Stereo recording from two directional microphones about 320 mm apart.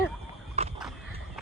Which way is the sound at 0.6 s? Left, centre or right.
Centre.